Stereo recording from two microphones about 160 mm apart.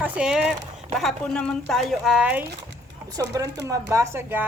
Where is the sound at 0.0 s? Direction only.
5° right (ahead or behind).